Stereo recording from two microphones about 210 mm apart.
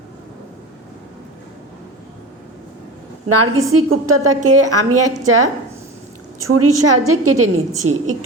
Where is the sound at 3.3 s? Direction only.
90° right.